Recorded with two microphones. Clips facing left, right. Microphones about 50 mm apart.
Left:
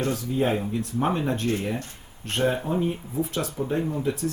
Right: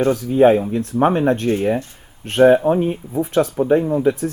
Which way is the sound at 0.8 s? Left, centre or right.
Right.